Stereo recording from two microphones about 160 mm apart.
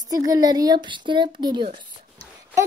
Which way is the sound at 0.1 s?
25° right (ahead or behind).